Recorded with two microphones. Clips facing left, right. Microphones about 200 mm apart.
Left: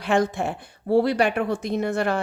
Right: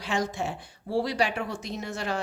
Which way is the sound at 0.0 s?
55° left (ahead or behind).